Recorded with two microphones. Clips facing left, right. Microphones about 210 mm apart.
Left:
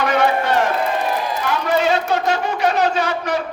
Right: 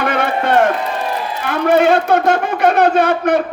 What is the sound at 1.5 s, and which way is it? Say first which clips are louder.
Speech: right 7 dB; 55° right (ahead or behind).